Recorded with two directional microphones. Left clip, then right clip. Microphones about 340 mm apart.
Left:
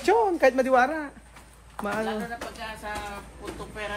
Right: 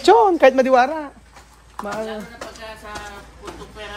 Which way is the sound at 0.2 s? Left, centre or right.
Right.